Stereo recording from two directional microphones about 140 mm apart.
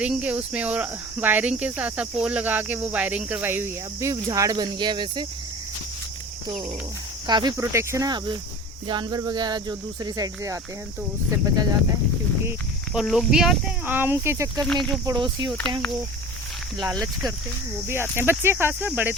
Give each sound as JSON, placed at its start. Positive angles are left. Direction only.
{"t": 0.0, "sound": "speech", "side_deg": -10}
{"t": 7.3, "sound": "speech", "side_deg": -30}
{"t": 12.9, "sound": "speech", "side_deg": -5}
{"t": 14.6, "sound": "speech", "side_deg": 5}
{"t": 15.0, "sound": "speech", "side_deg": -30}
{"t": 16.7, "sound": "speech", "side_deg": 5}
{"t": 18.2, "sound": "speech", "side_deg": -15}